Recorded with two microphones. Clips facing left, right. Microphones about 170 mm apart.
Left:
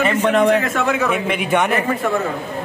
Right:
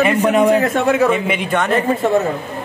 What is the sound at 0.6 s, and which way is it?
Speech, 30° right (ahead or behind).